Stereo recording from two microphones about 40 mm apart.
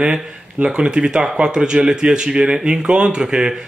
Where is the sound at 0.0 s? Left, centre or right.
Centre.